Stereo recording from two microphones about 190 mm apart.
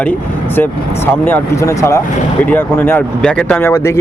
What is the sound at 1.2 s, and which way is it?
Speech, 15° left (ahead or behind).